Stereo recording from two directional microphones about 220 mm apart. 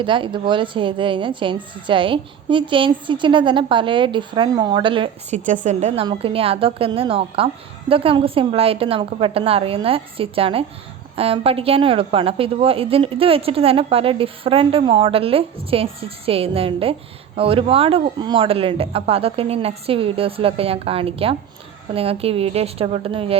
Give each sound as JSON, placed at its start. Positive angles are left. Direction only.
{"t": 0.0, "sound": "a woman's voice", "side_deg": -20}
{"t": 5.5, "sound": "a woman's voice", "side_deg": -35}